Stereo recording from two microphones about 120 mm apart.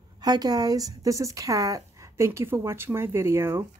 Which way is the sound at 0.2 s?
30° right (ahead or behind).